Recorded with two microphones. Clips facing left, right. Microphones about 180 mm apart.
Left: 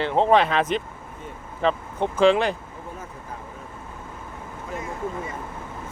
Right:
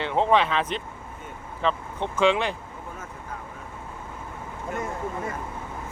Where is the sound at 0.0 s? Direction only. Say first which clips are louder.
Left 3 dB; 35° left (ahead or behind).